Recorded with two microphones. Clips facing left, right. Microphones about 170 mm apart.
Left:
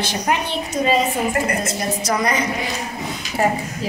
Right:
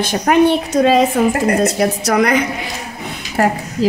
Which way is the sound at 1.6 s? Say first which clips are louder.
Right 8 dB; 65° right (ahead or behind).